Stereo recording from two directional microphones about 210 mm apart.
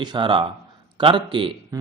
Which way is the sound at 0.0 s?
20° right (ahead or behind).